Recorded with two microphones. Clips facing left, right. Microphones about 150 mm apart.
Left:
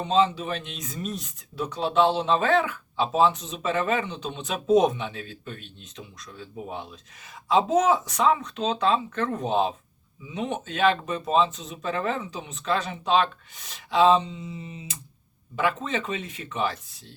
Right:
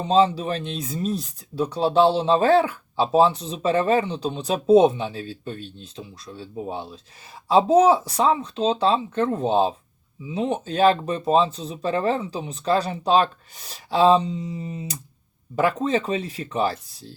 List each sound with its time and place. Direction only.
0.0 s speech: 35° right (ahead or behind)